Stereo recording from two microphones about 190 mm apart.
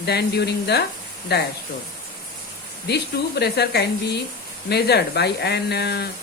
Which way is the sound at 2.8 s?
60° left (ahead or behind).